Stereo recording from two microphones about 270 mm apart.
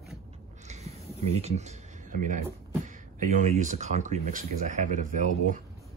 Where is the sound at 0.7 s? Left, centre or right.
Right.